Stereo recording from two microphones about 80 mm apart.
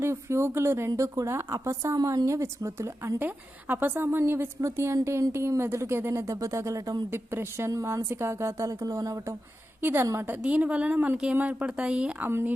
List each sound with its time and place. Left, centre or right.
0.0 s speech: right
3.2 s a woman's voice: right
7.1 s speech: right
9.8 s a woman's voice: right
10.4 s speech: centre
12.2 s a woman's voice: right